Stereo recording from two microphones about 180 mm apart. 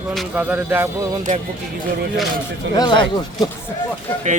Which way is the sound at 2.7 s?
25° left (ahead or behind).